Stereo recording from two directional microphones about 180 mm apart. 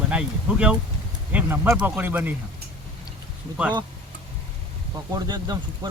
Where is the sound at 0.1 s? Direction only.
5° right (ahead or behind).